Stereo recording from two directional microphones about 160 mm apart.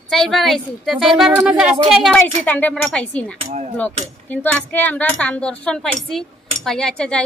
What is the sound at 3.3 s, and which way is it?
Speech, 45° right (ahead or behind).